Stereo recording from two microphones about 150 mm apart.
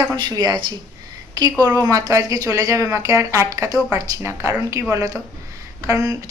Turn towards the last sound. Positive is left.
turn(degrees=-20)  # may be behind; listen again after turning